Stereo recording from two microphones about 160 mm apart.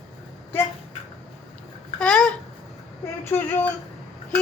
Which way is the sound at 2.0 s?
5° left (ahead or behind).